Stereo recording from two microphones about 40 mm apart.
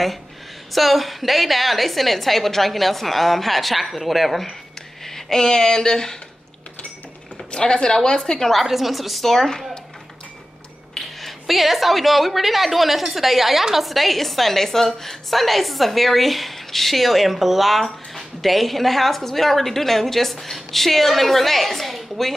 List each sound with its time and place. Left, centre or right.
0.7 s a woman's voice: centre
5.0 s speech: centre
7.5 s a woman's voice: centre
8.5 s a woman's voice: centre
11.0 s a woman's voice: centre